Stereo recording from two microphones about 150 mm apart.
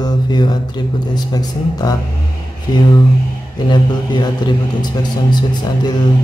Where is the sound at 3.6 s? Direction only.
30° left (ahead or behind).